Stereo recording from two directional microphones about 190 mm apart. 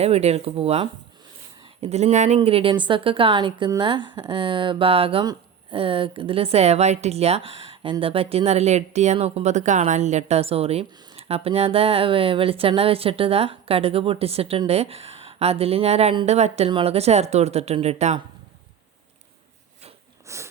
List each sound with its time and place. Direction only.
0.0 s a woman's voice: 35° right (ahead or behind)
20.2 s sniff: 15° right (ahead or behind)